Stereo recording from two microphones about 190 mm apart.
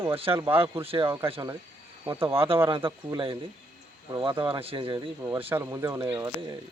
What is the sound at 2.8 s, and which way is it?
Speech, 25° right (ahead or behind).